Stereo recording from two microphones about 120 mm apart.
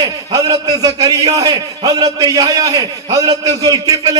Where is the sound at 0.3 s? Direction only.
30° right (ahead or behind).